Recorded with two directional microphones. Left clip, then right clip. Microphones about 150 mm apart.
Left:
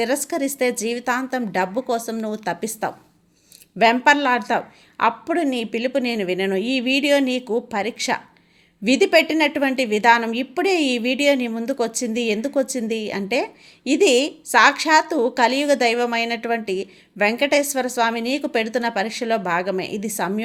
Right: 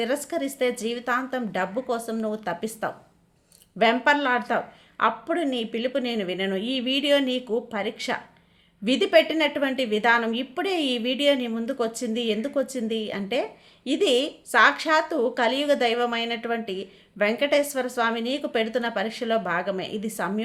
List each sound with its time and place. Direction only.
0.0 s a woman's voice: 30° left (ahead or behind)